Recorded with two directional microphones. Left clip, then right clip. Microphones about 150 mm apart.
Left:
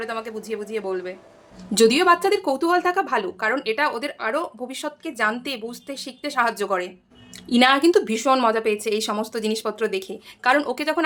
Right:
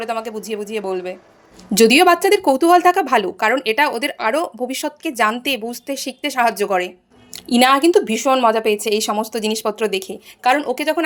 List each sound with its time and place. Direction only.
0.0 s a woman's voice: 10° right (ahead or behind)
8.5 s a woman's voice: 10° right (ahead or behind)